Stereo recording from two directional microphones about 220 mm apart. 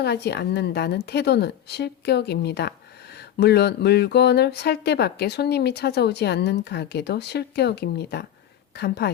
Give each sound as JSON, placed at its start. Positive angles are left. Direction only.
{"t": 0.0, "sound": "a woman's voice", "side_deg": 50}